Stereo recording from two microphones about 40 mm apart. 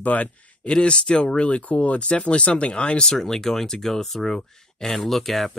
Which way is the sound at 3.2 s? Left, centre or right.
Centre.